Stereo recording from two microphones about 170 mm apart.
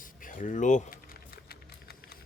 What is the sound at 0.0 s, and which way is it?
Typing, 50° left (ahead or behind).